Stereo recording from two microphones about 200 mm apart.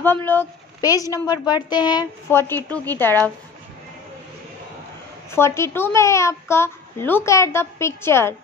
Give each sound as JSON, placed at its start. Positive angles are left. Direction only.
{"t": 0.0, "sound": "a woman's voice", "side_deg": 10}
{"t": 5.3, "sound": "a woman's voice", "side_deg": 15}